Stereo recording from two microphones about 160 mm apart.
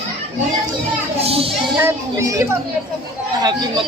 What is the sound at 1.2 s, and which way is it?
Children playing, 40° right (ahead or behind).